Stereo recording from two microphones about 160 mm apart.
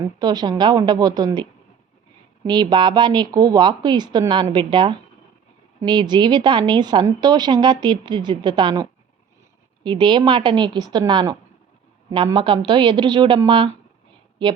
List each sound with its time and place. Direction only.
0.2 s a woman's voice: 25° right (ahead or behind)